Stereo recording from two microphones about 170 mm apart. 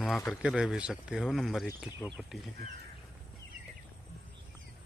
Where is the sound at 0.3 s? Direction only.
5° right (ahead or behind).